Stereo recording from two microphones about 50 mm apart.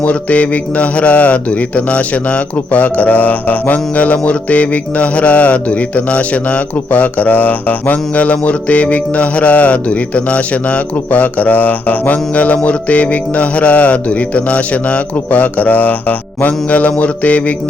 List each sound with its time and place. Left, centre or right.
0.0 s a man's voice: left
4.3 s mantra: left